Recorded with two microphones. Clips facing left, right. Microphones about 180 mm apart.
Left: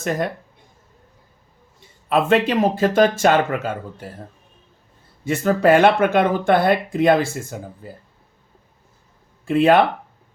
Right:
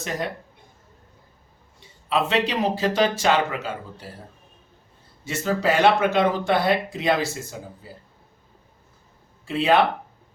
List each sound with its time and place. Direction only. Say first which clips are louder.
0.0 s speech: left 6 dB; 50° left (ahead or behind)
2.0 s speech: left 5 dB; 50° left (ahead or behind)
5.2 s speech: left 7 dB; 55° left (ahead or behind)
9.5 s speech: left 5 dB; 50° left (ahead or behind)